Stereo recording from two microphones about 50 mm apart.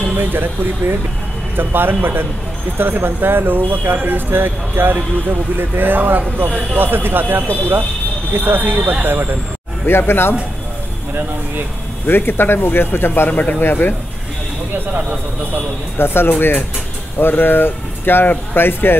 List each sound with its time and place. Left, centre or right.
0.2 s speech: right
9.8 s speech: left
12.1 s speech: left
13.3 s speech: left
13.6 s speech: left
16.0 s speech: left